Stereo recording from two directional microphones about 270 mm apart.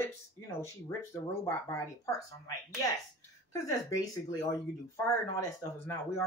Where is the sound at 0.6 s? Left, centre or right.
Centre.